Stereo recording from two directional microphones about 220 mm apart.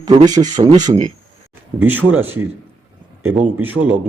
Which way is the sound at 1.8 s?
10° right (ahead or behind).